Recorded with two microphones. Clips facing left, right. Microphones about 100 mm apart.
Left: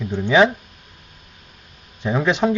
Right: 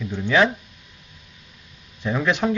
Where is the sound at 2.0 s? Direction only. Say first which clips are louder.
Left 3 dB; 20° left (ahead or behind).